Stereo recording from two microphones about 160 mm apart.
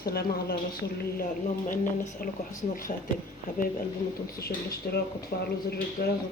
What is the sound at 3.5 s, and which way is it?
Speech, 60° left (ahead or behind).